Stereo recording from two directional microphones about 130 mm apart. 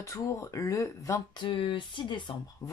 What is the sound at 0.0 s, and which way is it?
Speech, 25° left (ahead or behind).